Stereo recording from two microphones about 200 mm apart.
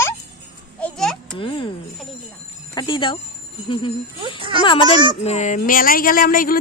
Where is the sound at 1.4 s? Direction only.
25° left (ahead or behind).